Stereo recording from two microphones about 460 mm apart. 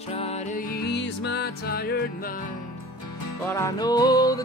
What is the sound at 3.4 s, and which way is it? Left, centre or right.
Music, centre.